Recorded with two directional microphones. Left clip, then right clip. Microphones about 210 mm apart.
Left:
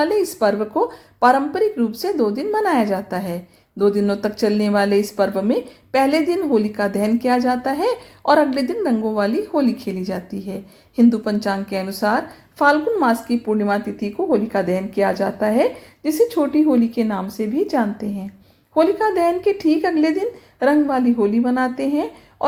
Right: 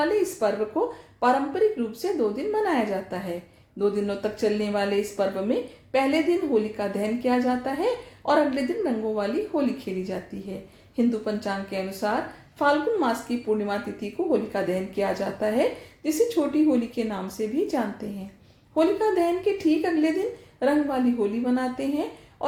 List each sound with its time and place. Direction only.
0.0 s a woman's voice: 40° left (ahead or behind)